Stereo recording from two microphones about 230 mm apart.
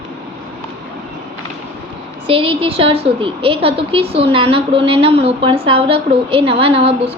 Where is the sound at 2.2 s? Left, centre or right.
Right.